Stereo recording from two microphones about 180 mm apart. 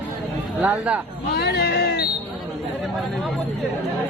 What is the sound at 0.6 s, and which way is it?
Speech, 10° right (ahead or behind).